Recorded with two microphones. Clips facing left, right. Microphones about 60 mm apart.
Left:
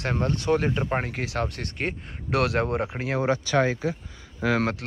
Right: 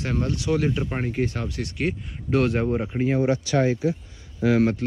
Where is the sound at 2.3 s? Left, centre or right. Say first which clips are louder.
Right 2 dB; left.